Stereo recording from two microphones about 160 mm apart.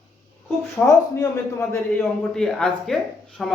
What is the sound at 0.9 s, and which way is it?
A man's voice, 20° left (ahead or behind).